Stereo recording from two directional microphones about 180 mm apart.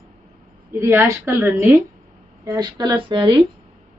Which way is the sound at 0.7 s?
15° right (ahead or behind).